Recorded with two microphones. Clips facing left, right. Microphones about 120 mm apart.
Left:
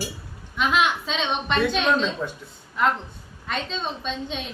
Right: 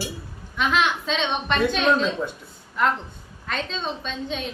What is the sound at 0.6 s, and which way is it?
A woman's voice, centre (ahead or behind).